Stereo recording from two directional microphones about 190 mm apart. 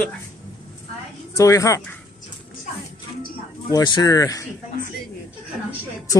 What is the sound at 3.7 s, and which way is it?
Speech, 20° left (ahead or behind).